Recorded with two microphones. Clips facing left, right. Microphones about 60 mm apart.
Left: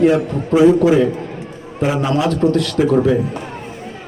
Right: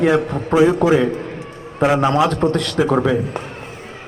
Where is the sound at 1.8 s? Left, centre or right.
Right.